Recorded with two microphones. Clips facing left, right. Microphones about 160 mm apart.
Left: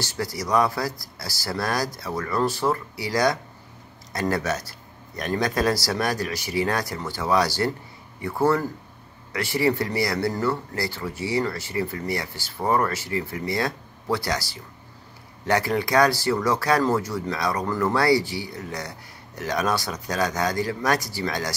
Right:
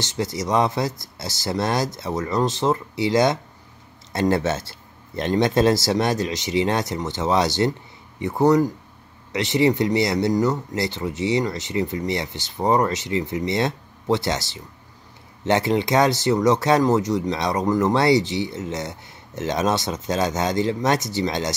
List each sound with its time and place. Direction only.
0.0 s speech: 20° right (ahead or behind)